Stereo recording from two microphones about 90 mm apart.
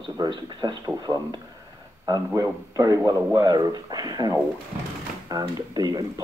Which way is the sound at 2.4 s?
35° right (ahead or behind).